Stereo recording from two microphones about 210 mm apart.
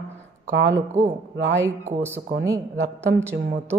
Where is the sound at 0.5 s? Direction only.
60° right (ahead or behind).